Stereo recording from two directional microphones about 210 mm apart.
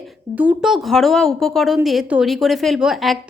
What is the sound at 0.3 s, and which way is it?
A woman's voice, 5° right (ahead or behind).